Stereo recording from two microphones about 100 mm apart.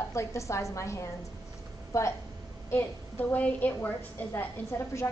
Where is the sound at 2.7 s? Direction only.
15° left (ahead or behind).